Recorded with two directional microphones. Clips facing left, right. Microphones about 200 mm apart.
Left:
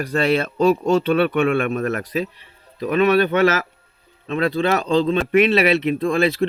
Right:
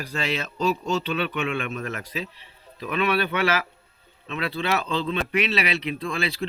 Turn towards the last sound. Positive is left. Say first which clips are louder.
# left 10 dB
turn(degrees=50)  # may be behind; listen again after turning